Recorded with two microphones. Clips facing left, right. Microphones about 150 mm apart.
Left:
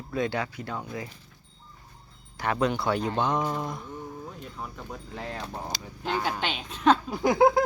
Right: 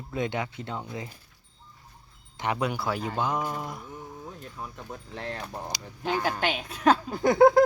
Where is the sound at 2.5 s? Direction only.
10° right (ahead or behind).